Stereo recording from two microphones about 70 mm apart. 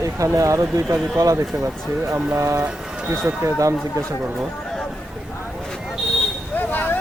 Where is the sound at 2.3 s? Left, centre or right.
Right.